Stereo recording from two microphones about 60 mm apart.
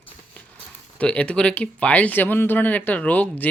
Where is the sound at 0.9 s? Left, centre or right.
Left.